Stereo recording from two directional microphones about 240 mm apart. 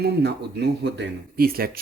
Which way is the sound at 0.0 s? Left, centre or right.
Right.